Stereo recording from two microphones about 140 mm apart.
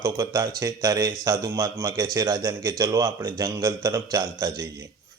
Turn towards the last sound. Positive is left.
turn(degrees=-25)  # may be behind; listen again after turning